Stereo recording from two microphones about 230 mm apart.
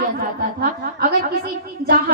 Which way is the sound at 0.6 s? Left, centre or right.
Right.